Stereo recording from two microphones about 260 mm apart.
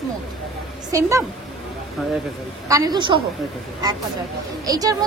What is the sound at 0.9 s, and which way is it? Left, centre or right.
Speech, centre.